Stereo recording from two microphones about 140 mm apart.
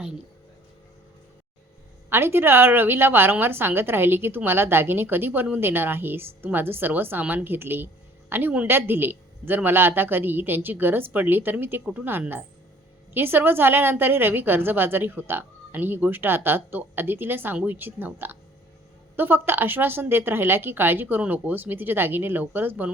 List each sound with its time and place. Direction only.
2.0 s a woman's voice: 15° right (ahead or behind)